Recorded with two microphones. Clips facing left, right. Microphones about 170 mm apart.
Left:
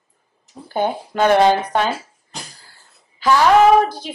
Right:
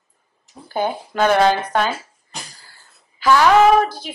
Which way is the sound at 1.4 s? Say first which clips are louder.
Left 2 dB; 15° left (ahead or behind).